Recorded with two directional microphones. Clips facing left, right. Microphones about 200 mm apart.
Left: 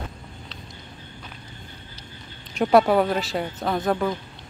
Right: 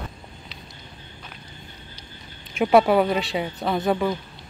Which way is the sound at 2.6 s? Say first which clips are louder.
Right 1 dB; centre (ahead or behind).